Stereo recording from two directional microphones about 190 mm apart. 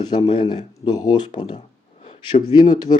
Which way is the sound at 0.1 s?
25° left (ahead or behind).